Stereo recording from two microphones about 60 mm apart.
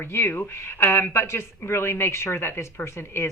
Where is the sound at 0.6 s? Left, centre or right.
Left.